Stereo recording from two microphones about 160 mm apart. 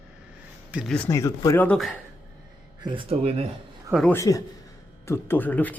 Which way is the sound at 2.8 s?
30° right (ahead or behind).